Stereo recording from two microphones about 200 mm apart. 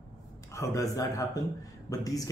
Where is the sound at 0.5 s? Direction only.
15° left (ahead or behind).